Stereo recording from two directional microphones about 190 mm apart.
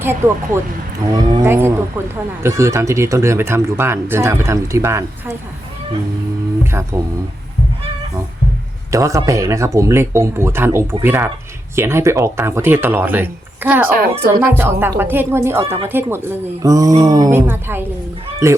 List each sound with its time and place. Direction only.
0.0 s speech: 10° right (ahead or behind)
6.9 s speech: 15° right (ahead or behind)
8.9 s speech: 15° right (ahead or behind)
13.9 s speech: 55° right (ahead or behind)
14.3 s speech: 15° right (ahead or behind)